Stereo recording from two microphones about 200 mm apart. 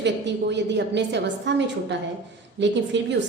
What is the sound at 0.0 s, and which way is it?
A woman's voice, 60° right (ahead or behind).